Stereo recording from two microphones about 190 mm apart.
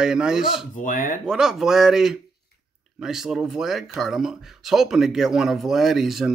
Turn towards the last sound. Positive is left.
turn(degrees=0)  # may be behind; listen again after turning